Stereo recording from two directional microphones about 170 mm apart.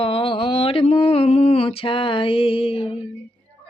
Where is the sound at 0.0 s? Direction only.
30° left (ahead or behind).